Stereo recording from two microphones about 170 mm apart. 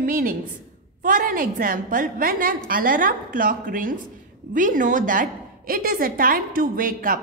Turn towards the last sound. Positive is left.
turn(degrees=-55)  # may be behind; listen again after turning